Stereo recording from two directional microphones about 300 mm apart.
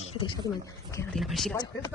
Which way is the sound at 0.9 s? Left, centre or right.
Centre.